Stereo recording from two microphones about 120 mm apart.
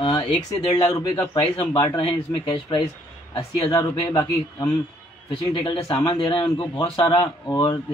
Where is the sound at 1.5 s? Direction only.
45° left (ahead or behind).